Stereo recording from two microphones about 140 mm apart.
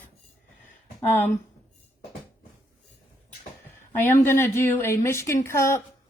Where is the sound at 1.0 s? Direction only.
15° left (ahead or behind).